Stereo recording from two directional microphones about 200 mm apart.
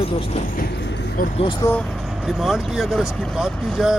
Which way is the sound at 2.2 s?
Centre (ahead or behind).